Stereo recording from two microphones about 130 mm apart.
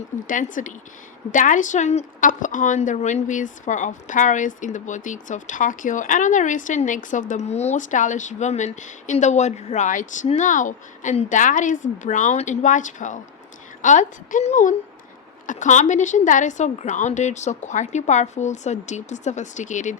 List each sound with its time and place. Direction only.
0.3 s a woman's voice: 90° left; by 20.0 s 70° left (ahead or behind)